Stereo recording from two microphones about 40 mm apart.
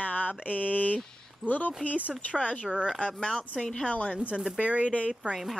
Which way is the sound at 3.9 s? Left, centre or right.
Left.